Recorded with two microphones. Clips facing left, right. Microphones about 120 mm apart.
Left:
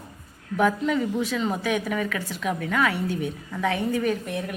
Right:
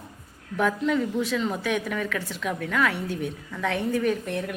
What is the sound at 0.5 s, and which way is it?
A woman's voice, 5° left (ahead or behind).